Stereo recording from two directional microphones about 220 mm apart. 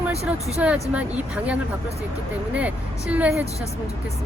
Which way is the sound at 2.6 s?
5° right (ahead or behind).